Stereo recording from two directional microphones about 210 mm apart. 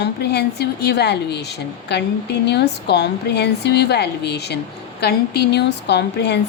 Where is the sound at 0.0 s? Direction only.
50° left (ahead or behind).